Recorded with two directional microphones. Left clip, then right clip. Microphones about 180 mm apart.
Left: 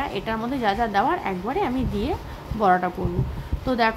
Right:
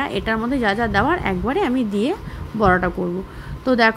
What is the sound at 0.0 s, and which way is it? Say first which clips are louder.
A woman's voice: right 5 dB; 20° right (ahead or behind).